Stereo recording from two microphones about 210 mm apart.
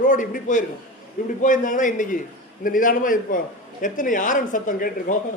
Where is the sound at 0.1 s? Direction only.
40° left (ahead or behind).